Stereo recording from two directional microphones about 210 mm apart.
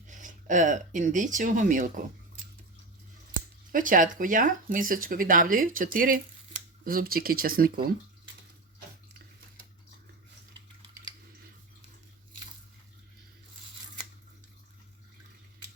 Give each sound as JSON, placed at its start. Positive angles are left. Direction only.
{"t": 0.1, "sound": "speech", "side_deg": -35}
{"t": 3.7, "sound": "speech", "side_deg": -40}